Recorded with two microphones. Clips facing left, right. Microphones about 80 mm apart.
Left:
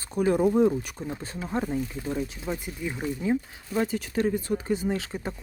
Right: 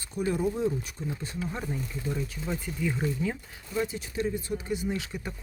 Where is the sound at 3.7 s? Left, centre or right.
Left.